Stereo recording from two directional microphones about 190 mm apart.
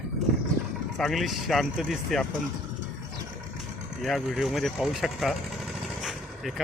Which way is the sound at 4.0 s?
Centre (ahead or behind).